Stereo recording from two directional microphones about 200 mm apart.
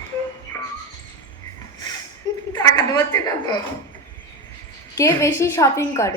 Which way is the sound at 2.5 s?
20° left (ahead or behind).